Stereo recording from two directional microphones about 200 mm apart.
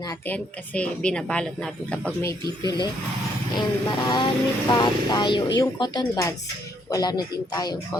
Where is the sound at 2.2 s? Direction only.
15° left (ahead or behind).